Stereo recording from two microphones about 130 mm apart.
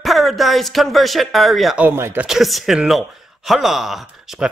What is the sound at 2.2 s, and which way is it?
A man's voice, centre (ahead or behind).